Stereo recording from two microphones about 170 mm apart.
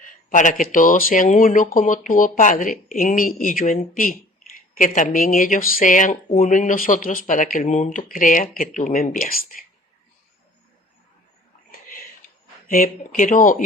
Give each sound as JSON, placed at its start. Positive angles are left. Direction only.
{"t": 0.0, "sound": "speech", "side_deg": 50}
{"t": 11.7, "sound": "a sound", "side_deg": 55}
{"t": 12.6, "sound": "speech", "side_deg": 55}